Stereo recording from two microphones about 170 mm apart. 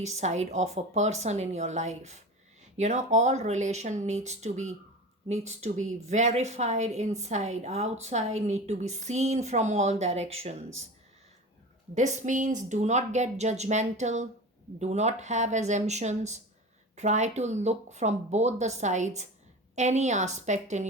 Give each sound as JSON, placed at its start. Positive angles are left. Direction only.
{"t": 0.0, "sound": "a woman's voice", "side_deg": -40}
{"t": 11.9, "sound": "speech", "side_deg": -45}